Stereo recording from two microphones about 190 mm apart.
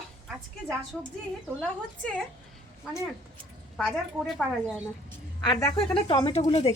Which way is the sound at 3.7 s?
5° left (ahead or behind).